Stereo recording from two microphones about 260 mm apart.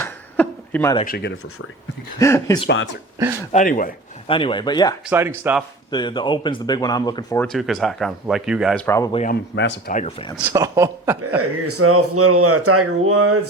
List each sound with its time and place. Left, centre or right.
0.0 s a sound: centre
1.0 s a man's voice: left
2.1 s speech: centre
2.6 s speech: left
3.5 s a man's voice: left
4.3 s speech: centre
5.0 s speech: centre
5.9 s speech: centre
7.4 s speech: centre
9.1 s speech: left
9.6 s speech: left
9.9 s speech: left
10.3 s speech: centre
11.3 s speech: right